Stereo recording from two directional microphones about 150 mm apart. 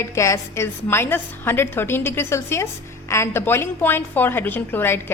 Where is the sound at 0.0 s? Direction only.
20° left (ahead or behind).